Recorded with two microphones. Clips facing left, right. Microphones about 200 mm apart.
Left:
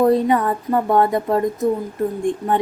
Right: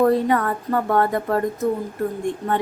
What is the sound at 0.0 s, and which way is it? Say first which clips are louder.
A woman's voice: left 2 dB; 20° left (ahead or behind).